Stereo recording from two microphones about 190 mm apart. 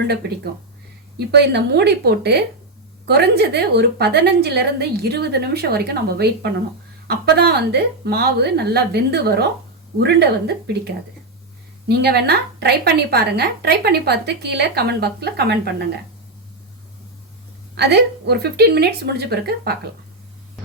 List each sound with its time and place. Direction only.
1.3 s a woman's voice: 60° right (ahead or behind)
11.9 s a woman's voice: 55° right (ahead or behind)
17.7 s a woman's voice: 60° right (ahead or behind)